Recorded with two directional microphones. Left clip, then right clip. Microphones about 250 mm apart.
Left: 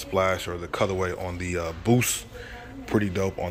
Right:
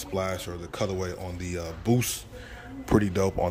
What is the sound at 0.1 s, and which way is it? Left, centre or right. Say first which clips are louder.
Speech: left 7 dB; centre.